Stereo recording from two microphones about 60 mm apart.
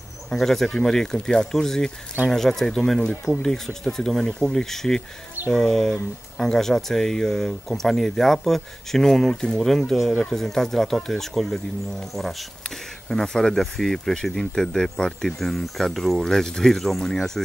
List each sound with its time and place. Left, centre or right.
0.3 s speech: centre